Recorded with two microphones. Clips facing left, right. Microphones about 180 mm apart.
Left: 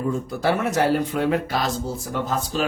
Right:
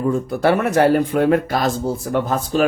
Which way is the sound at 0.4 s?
60° right (ahead or behind).